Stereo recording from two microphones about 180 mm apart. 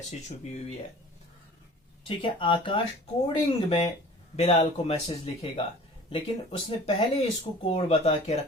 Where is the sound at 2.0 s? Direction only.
30° left (ahead or behind).